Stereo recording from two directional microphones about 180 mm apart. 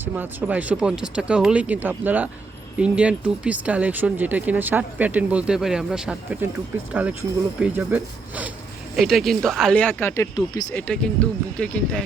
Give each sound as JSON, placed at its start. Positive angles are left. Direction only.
{"t": 0.0, "sound": "speech", "side_deg": -10}
{"t": 10.3, "sound": "speech", "side_deg": 20}
{"t": 10.8, "sound": "speech", "side_deg": 5}